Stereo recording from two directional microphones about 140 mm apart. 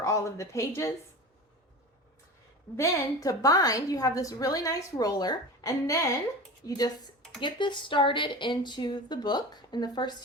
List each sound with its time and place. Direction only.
0.0 s a woman's voice: 20° left (ahead or behind)
2.7 s a woman's voice: 20° left (ahead or behind)